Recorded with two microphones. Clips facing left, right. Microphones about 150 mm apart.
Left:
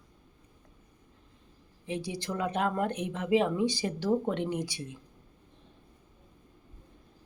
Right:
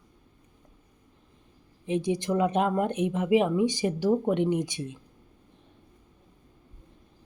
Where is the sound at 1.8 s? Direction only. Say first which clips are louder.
Right 8 dB; 20° right (ahead or behind).